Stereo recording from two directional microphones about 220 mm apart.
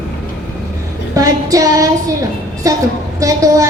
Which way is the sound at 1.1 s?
15° right (ahead or behind).